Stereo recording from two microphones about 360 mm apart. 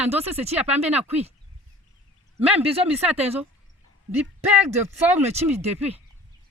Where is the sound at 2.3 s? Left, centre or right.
Centre.